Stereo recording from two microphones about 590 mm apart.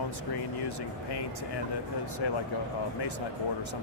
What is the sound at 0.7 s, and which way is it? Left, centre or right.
Speech, left.